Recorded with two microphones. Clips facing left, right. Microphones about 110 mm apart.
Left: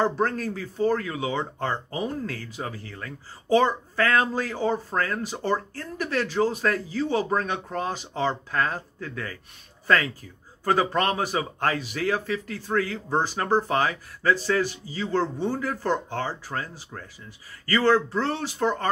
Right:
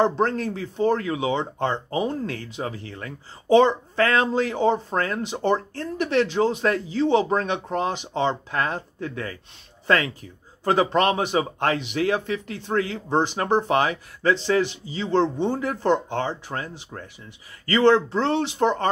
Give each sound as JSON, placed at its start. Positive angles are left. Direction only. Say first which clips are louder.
{"t": 0.0, "sound": "speech", "louder": "right 3 dB", "side_deg": -25}
{"t": 10.6, "sound": "speech", "louder": "right 3 dB", "side_deg": -20}